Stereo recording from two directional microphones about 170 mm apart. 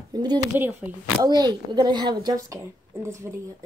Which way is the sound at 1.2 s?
25° right (ahead or behind).